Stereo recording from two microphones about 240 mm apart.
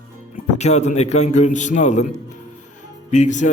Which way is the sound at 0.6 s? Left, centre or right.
Left.